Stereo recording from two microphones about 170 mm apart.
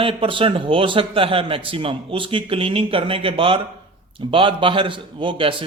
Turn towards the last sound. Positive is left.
turn(degrees=-30)  # may be behind; listen again after turning